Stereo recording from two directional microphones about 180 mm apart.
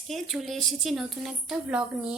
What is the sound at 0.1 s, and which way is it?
A woman's voice, centre (ahead or behind).